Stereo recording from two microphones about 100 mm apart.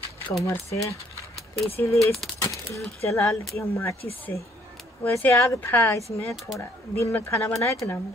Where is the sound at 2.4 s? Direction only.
30° left (ahead or behind).